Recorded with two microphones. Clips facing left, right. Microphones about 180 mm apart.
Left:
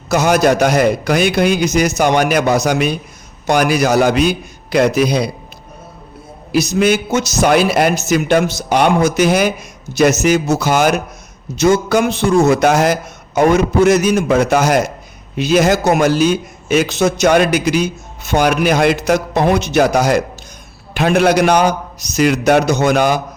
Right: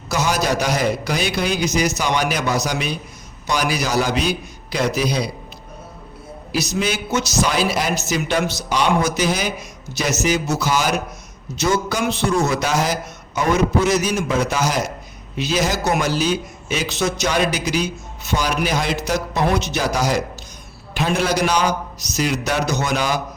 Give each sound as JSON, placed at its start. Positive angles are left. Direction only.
{"t": 0.1, "sound": "a man's voice", "side_deg": 55}
{"t": 6.5, "sound": "a man's voice", "side_deg": 55}